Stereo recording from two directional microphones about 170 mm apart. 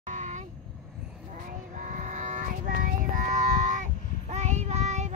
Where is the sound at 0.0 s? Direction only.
45° right (ahead or behind).